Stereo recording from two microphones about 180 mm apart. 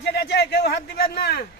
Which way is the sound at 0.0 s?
70° left (ahead or behind).